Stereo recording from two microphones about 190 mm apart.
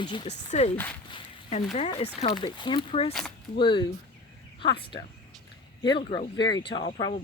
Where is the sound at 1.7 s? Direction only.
30° left (ahead or behind).